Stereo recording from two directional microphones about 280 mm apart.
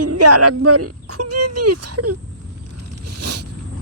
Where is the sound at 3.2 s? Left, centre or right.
Right.